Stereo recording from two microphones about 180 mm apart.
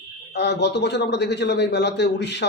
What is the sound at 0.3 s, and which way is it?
A man's voice, 70° left (ahead or behind).